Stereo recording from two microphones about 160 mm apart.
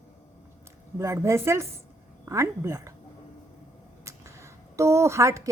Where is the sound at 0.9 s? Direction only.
20° right (ahead or behind).